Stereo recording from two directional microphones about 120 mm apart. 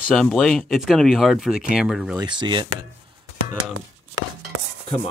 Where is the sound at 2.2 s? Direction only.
40° right (ahead or behind).